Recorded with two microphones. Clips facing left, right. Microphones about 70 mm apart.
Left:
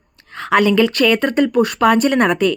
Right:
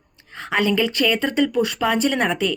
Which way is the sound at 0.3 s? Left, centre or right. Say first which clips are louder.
Left 7 dB; left.